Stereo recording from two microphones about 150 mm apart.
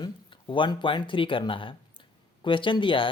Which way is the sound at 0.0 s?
30° left (ahead or behind).